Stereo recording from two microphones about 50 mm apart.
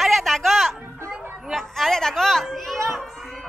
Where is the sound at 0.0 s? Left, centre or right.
Centre.